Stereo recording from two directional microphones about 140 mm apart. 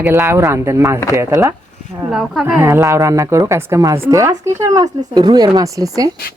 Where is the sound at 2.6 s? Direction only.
20° right (ahead or behind).